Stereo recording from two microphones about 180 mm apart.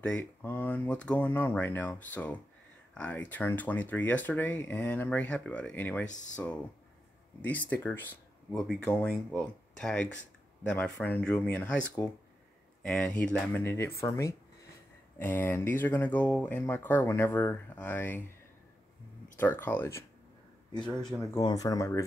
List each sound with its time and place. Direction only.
0.0 s speech: 5° left (ahead or behind)
19.3 s speech: 10° left (ahead or behind)
21.4 s speech: 20° left (ahead or behind)